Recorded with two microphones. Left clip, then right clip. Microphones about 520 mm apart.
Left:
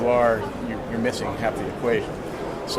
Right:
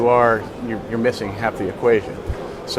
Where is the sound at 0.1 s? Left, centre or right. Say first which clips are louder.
Right 3 dB; right.